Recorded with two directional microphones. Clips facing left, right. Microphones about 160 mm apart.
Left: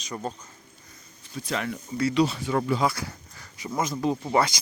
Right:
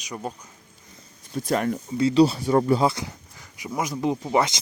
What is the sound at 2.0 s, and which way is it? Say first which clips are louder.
Speech: right 5 dB; 30° right (ahead or behind).